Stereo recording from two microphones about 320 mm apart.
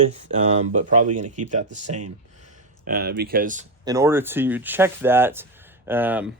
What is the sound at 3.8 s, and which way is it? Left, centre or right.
Speech, centre.